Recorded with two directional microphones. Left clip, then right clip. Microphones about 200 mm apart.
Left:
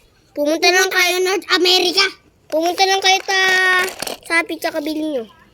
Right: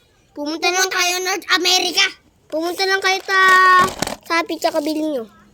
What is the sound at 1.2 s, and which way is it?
A child's voice, 40° right (ahead or behind).